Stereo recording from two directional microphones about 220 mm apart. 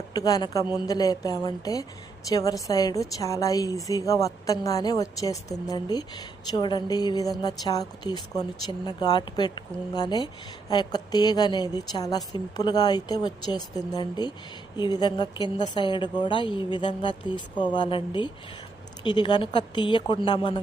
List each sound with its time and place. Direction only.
0.1 s a woman's voice: 15° left (ahead or behind)